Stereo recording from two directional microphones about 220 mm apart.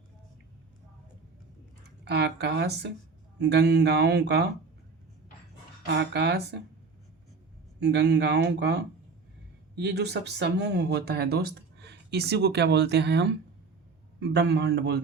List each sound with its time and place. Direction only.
2.0 s speech: 50° right (ahead or behind)
5.8 s speech: 50° right (ahead or behind)
7.8 s speech: 50° right (ahead or behind)